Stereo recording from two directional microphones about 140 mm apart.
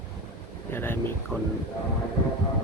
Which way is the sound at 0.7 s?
15° left (ahead or behind).